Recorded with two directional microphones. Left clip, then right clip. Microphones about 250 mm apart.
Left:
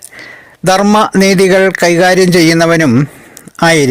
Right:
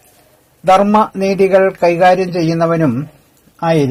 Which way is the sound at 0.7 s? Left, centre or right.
Left.